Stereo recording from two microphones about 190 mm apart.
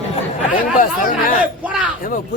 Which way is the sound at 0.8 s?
45° left (ahead or behind).